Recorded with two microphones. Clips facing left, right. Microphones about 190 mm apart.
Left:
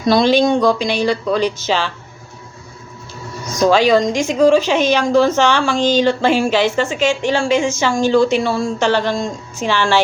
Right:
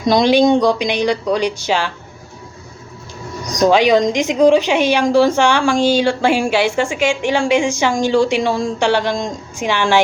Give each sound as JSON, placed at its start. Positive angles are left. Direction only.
{"t": 0.0, "sound": "a woman's voice", "side_deg": -20}
{"t": 3.4, "sound": "a woman's voice", "side_deg": -15}